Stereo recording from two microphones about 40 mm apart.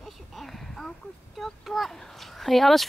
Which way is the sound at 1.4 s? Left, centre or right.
Centre.